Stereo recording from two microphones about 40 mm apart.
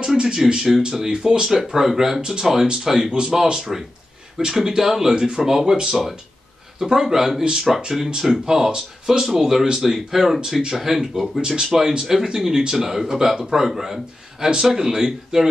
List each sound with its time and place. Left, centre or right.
0.0 s speech: centre
3.1 s speech: right
3.5 s speech: centre